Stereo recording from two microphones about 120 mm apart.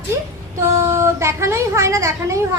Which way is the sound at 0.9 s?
20° right (ahead or behind).